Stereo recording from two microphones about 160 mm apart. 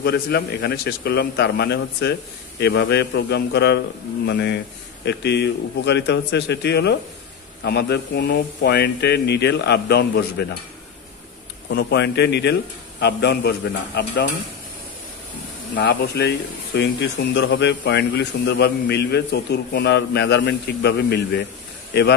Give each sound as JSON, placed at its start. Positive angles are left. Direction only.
{"t": 0.0, "sound": "speech", "side_deg": 85}
{"t": 11.7, "sound": "speech", "side_deg": 90}
{"t": 15.7, "sound": "speech", "side_deg": 90}